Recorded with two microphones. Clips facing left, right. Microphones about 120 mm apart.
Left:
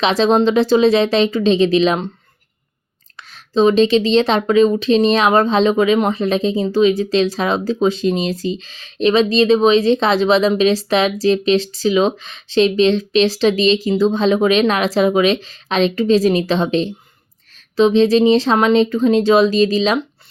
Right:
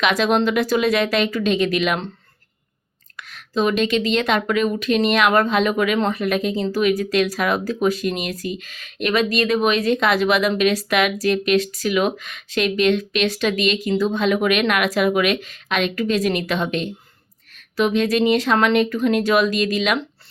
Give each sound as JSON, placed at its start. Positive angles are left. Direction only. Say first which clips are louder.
{"t": 0.0, "sound": "speech", "louder": "left 4 dB", "side_deg": 30}
{"t": 3.2, "sound": "speech", "louder": "left 6 dB", "side_deg": 30}